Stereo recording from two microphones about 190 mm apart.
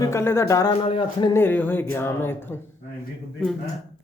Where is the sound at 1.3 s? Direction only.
10° left (ahead or behind).